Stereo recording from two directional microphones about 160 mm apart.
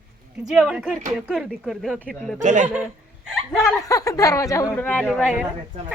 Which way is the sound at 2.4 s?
50° right (ahead or behind).